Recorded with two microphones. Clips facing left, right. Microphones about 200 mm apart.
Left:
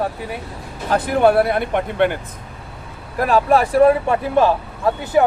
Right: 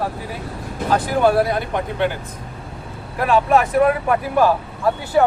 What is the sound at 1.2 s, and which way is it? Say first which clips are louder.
Speech: left 3 dB; 60° left (ahead or behind).